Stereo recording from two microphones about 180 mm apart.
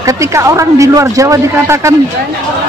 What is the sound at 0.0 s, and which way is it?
A man's voice, 15° right (ahead or behind).